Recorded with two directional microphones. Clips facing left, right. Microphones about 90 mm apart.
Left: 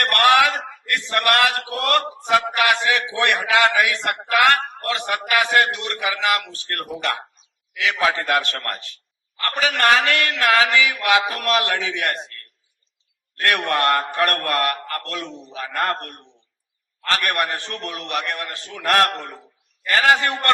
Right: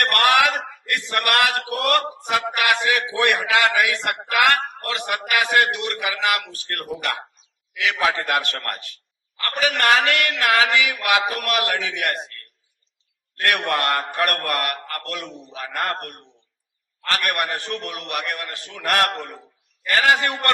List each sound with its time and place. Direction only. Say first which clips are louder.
0.1 s a sound: left 5 dB; 25° left (ahead or behind)
1.0 s mantra: left 2 dB; 30° left (ahead or behind)
2.3 s a man's voice: left 3 dB; 25° left (ahead or behind)
13.7 s a man's voice: left 3 dB; 30° left (ahead or behind)